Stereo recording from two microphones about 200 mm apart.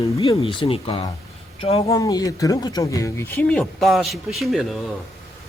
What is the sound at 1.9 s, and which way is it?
Speech, 20° left (ahead or behind).